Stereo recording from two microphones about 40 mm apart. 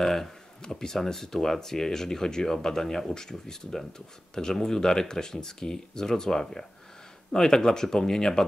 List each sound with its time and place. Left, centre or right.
0.0 s speech: centre